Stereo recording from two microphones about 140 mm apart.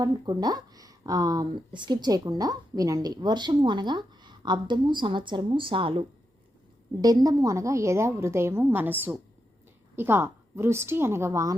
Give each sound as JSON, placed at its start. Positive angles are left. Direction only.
{"t": 0.0, "sound": "speech", "side_deg": -30}
{"t": 7.0, "sound": "a woman's voice", "side_deg": -25}